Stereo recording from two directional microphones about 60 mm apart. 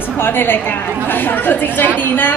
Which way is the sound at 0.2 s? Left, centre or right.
Left.